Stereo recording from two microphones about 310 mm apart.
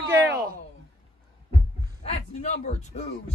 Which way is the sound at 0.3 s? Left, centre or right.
Right.